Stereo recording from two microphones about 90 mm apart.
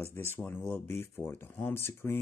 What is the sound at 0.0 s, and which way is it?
Speech, 25° left (ahead or behind).